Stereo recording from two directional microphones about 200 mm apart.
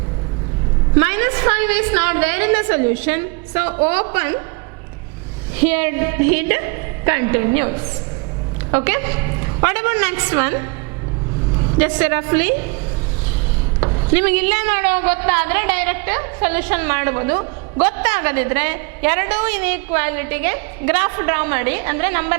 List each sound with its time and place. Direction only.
0.9 s a woman's voice: 10° right (ahead or behind)
5.5 s a woman's voice: 10° right (ahead or behind)
11.8 s a woman's voice: 10° right (ahead or behind)
13.7 s a sound: 25° right (ahead or behind)
14.1 s a woman's voice: 10° right (ahead or behind)